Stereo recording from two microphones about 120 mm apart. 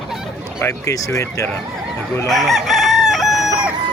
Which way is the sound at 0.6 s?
25° left (ahead or behind).